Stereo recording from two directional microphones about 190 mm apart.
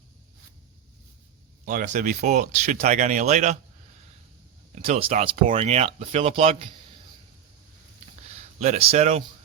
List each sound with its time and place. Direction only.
1.6 s speech: 40° right (ahead or behind)
4.7 s speech: 35° right (ahead or behind)
8.5 s speech: 35° right (ahead or behind)